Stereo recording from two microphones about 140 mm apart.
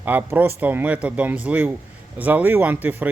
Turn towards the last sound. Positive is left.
turn(degrees=-10)  # may be behind; listen again after turning